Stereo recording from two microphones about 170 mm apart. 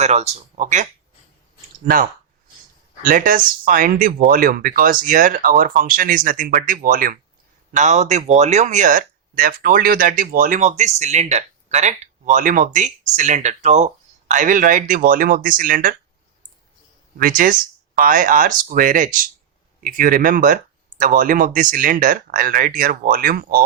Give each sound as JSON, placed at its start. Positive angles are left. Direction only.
{"t": 0.0, "sound": "speech", "side_deg": -40}
{"t": 17.2, "sound": "speech", "side_deg": -55}